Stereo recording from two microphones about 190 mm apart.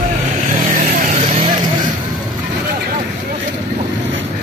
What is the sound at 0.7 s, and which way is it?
Vehicle, 45° right (ahead or behind).